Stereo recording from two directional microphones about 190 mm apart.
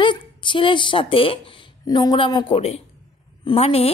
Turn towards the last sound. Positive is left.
turn(degrees=30)  # may be behind; listen again after turning